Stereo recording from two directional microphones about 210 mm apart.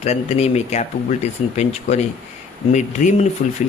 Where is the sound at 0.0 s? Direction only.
30° left (ahead or behind).